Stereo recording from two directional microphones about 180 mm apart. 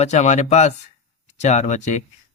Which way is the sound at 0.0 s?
40° left (ahead or behind).